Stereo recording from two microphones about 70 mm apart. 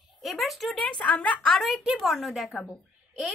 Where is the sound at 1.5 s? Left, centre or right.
Centre.